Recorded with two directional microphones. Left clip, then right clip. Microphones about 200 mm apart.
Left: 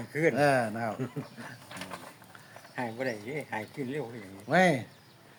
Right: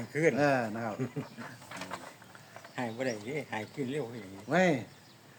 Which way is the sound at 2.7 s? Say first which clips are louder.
Left 1 dB; centre (ahead or behind).